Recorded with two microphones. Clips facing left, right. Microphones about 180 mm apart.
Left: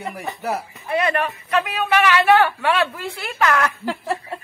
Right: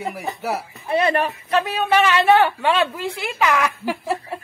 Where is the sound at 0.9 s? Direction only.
25° right (ahead or behind).